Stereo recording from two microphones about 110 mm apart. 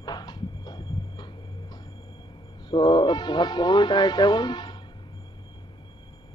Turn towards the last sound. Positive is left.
turn(degrees=40)  # may be behind; listen again after turning